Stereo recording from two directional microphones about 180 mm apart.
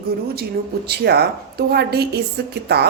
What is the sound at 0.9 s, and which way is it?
A woman's voice, 65° right (ahead or behind).